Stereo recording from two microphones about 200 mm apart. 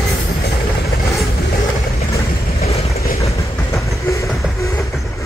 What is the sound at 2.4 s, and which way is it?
Vehicle, 30° left (ahead or behind).